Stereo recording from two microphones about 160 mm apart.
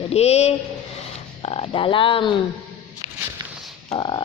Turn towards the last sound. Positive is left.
turn(degrees=30)  # may be behind; listen again after turning